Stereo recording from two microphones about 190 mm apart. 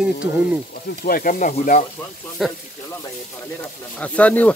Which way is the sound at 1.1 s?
50° left (ahead or behind).